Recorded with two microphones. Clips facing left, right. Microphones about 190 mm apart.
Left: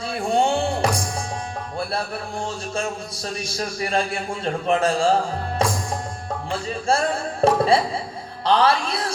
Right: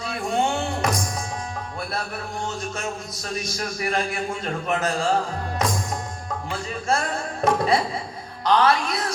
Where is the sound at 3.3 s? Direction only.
30° left (ahead or behind).